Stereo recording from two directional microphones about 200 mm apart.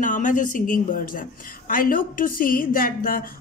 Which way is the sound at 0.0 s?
40° left (ahead or behind).